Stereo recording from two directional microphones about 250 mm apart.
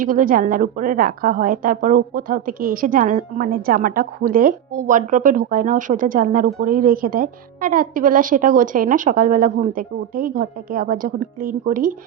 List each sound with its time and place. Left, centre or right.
0.0 s a woman's voice: right